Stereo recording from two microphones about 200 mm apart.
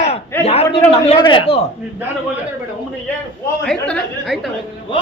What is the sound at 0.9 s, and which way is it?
Speech, 25° left (ahead or behind).